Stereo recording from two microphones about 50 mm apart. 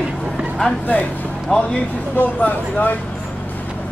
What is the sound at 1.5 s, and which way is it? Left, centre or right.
Speech, centre.